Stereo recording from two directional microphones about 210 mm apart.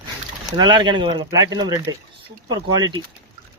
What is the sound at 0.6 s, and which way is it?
Speech, 20° right (ahead or behind).